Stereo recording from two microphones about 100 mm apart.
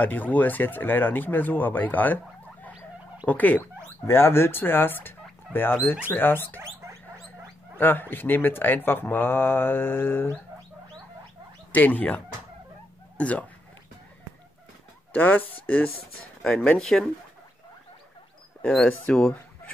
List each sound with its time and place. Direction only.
0.0 s speech: 15° left (ahead or behind)
3.3 s speech: 15° left (ahead or behind)
7.8 s speech: 20° left (ahead or behind)
11.7 s speech: 15° left (ahead or behind)
13.2 s speech: 15° left (ahead or behind)
15.1 s speech: 20° left (ahead or behind)
16.4 s speech: 5° left (ahead or behind)
18.6 s speech: 10° left (ahead or behind)